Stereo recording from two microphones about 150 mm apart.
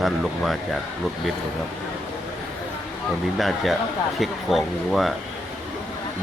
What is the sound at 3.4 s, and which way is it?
Speech, centre (ahead or behind).